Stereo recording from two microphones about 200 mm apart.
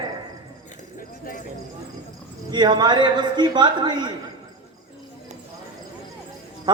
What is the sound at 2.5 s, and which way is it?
A man's voice, 20° right (ahead or behind).